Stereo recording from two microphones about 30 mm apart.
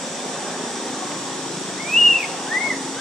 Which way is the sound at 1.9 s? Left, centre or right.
Centre.